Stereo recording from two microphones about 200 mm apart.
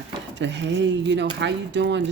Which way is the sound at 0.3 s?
60° right (ahead or behind).